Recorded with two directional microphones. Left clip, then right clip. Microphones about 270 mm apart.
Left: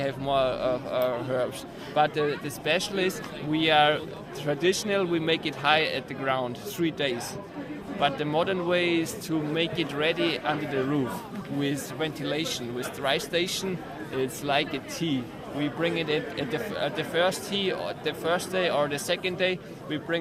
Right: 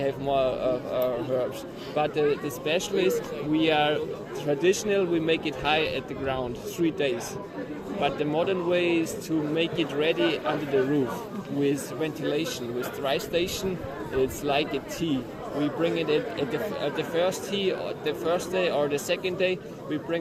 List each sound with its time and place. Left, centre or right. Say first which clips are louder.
0.0 s speech: right 1 dB; left
11.6 s speech: right 3 dB; left